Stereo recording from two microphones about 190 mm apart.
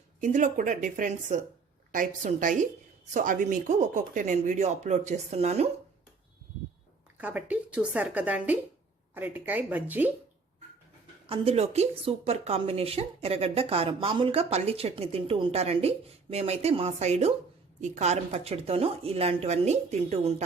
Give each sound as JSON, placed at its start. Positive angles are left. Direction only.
{"t": 0.2, "sound": "a woman's voice", "side_deg": -40}
{"t": 7.2, "sound": "a woman's voice", "side_deg": -10}
{"t": 11.3, "sound": "speech", "side_deg": -30}